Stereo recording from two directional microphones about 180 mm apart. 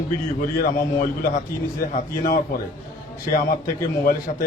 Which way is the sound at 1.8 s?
50° left (ahead or behind).